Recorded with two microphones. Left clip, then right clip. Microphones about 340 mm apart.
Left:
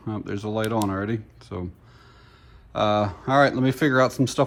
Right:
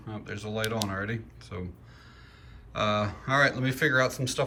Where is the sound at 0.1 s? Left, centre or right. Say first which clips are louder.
Left 7 dB; centre.